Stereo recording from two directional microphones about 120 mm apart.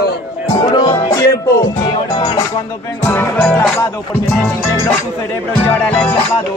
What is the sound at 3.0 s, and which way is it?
Speech, 15° left (ahead or behind).